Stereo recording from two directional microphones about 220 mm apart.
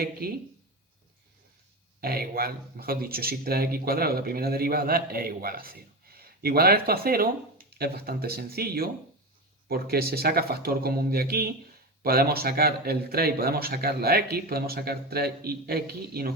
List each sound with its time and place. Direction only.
0.0 s speech: 45° right (ahead or behind)
2.0 s speech: 45° right (ahead or behind)